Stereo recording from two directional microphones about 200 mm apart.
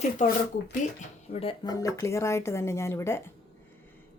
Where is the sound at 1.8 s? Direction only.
15° left (ahead or behind).